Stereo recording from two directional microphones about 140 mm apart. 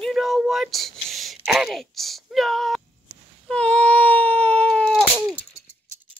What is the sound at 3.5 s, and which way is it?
Baby cry, 10° left (ahead or behind).